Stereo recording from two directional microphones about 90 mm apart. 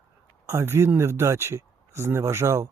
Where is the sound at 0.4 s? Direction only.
30° right (ahead or behind).